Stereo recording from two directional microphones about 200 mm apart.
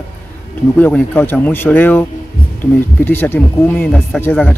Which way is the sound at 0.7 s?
10° left (ahead or behind).